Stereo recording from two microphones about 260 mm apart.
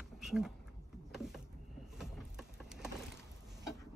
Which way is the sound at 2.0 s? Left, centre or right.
Centre.